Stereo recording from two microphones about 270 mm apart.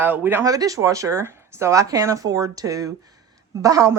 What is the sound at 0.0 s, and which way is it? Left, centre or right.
Speech, centre.